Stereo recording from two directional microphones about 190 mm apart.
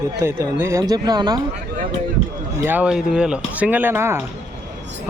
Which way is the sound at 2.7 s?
5° right (ahead or behind).